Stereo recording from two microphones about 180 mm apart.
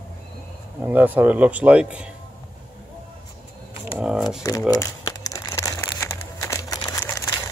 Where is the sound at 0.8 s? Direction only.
10° right (ahead or behind).